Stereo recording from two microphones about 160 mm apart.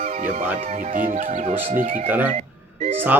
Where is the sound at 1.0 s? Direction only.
50° right (ahead or behind).